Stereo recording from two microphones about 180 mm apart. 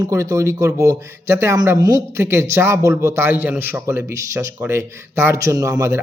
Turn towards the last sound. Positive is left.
turn(degrees=-15)  # may be behind; listen again after turning